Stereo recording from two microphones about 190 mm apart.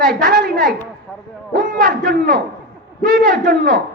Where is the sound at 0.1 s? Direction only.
45° right (ahead or behind).